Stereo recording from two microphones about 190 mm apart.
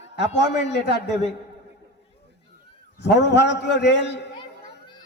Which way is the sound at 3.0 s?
65° left (ahead or behind).